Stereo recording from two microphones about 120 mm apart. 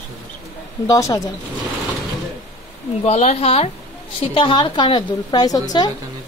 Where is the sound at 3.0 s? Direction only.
60° left (ahead or behind).